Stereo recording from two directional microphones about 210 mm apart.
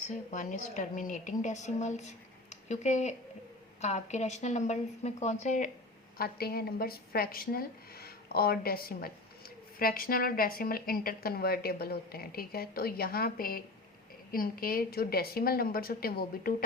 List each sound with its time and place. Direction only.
0.1 s a woman's voice: 35° left (ahead or behind)
6.1 s a woman's voice: 45° left (ahead or behind)